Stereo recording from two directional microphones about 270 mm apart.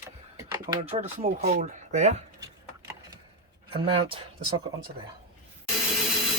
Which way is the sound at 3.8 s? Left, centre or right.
Centre.